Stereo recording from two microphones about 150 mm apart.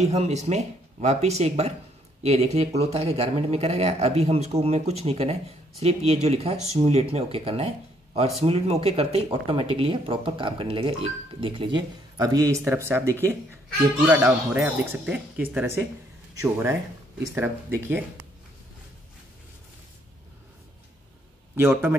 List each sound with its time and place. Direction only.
0.0 s speech: 45° right (ahead or behind); by 13.1 s 15° right (ahead or behind)
14.2 s speech: 15° right (ahead or behind)
21.5 s speech: 15° right (ahead or behind)